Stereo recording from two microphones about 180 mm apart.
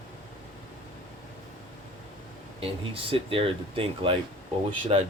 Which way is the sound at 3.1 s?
30° right (ahead or behind).